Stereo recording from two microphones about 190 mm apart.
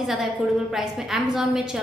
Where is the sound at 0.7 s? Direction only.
Centre (ahead or behind).